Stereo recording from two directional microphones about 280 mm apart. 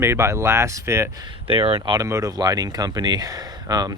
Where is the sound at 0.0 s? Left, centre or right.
Centre.